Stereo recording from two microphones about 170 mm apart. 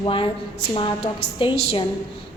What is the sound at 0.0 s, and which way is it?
Speech, 30° left (ahead or behind).